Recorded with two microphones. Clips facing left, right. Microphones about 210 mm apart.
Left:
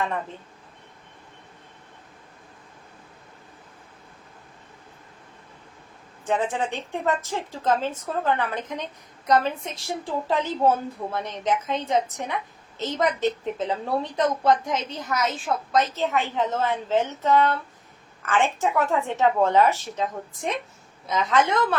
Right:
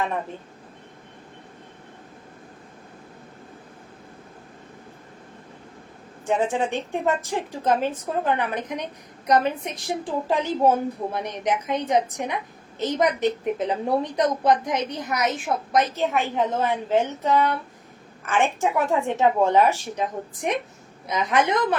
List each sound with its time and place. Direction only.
6.2 s a woman's voice: 15° right (ahead or behind)